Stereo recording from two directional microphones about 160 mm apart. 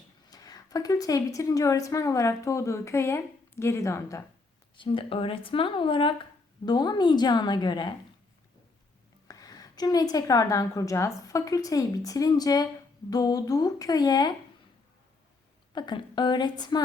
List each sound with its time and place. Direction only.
0.3 s a woman's voice: 25° left (ahead or behind)
4.8 s a woman's voice: 35° left (ahead or behind)
9.2 s a woman's voice: 20° left (ahead or behind)
15.7 s a woman's voice: 30° left (ahead or behind)